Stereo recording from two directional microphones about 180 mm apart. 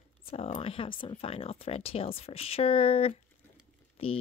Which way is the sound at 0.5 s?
30° left (ahead or behind).